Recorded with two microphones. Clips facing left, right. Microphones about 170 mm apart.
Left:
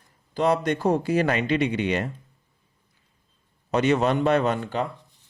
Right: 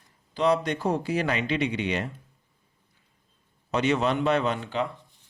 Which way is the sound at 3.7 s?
45° left (ahead or behind).